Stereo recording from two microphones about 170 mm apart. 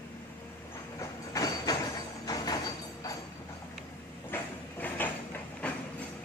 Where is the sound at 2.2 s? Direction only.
20° left (ahead or behind).